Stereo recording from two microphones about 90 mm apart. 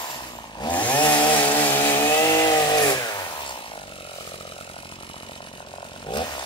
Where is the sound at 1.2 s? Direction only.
65° left (ahead or behind).